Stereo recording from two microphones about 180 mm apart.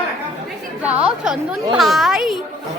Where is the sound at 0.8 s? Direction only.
5° right (ahead or behind).